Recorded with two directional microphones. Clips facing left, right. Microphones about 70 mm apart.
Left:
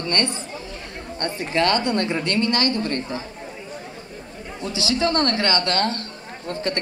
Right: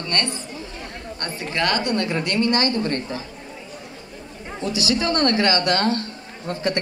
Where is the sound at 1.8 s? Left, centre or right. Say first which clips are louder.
Left 1 dB; left.